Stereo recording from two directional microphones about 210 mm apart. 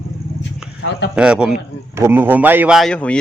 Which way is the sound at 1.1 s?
5° right (ahead or behind).